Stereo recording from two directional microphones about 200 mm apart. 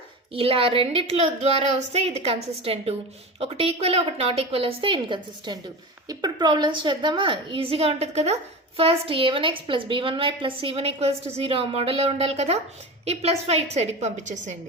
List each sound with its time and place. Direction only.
0.3 s a woman's voice: 25° right (ahead or behind)